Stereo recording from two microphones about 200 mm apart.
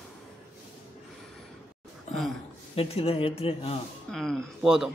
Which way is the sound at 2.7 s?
30° left (ahead or behind).